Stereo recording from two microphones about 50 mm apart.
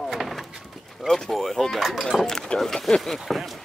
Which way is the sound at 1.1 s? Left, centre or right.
Centre.